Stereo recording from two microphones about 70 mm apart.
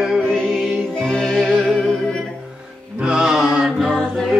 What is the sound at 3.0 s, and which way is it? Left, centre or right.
Music, centre.